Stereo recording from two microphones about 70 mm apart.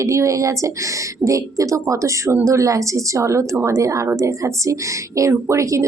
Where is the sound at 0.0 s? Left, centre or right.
Right.